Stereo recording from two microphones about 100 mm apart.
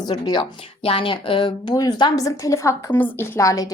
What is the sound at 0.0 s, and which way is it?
Speech, 45° left (ahead or behind).